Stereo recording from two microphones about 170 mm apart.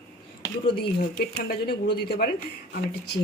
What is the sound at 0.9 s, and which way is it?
Speech, 65° left (ahead or behind).